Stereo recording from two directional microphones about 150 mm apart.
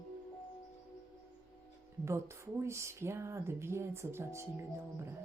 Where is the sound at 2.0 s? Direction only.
20° right (ahead or behind).